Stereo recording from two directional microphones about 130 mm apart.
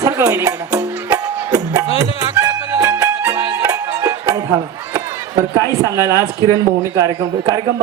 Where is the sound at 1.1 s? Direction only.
30° right (ahead or behind).